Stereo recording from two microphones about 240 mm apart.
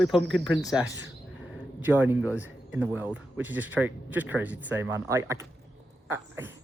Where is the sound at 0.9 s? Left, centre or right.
Right.